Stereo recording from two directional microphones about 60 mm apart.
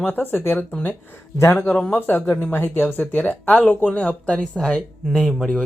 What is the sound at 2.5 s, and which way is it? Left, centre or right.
Speech, left.